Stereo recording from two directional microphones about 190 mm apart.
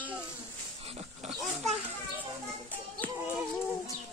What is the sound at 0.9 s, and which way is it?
Roaring cats, 35° right (ahead or behind).